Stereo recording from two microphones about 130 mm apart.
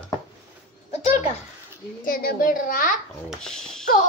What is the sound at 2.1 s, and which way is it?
Speech, 90° left.